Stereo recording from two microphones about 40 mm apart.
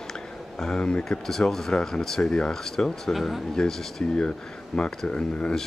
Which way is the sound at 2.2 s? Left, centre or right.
Left.